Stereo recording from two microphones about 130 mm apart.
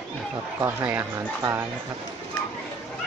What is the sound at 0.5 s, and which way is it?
Speech, 15° right (ahead or behind).